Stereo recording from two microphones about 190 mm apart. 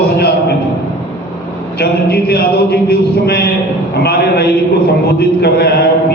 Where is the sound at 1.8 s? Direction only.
55° left (ahead or behind).